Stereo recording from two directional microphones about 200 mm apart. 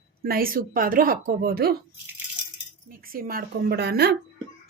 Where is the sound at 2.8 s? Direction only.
45° right (ahead or behind).